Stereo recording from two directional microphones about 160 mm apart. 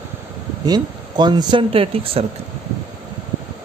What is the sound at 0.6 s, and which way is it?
Speech, 25° right (ahead or behind).